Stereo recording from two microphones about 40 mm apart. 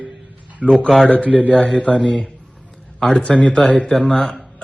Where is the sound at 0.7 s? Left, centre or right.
Centre.